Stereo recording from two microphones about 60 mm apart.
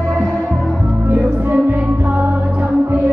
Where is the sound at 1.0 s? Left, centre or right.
Right.